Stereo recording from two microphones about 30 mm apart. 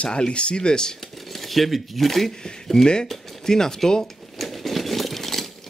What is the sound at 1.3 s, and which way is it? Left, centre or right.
Speech, centre.